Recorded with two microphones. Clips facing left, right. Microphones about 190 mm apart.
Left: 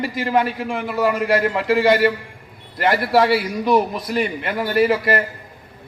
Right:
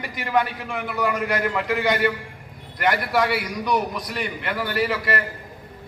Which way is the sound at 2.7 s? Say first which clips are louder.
Left 5 dB; 30° left (ahead or behind).